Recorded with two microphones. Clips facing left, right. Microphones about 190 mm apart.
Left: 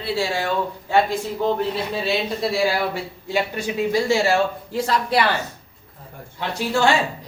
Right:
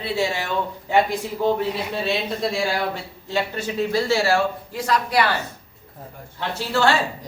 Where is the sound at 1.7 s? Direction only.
Centre (ahead or behind); by 5.2 s 30° left (ahead or behind).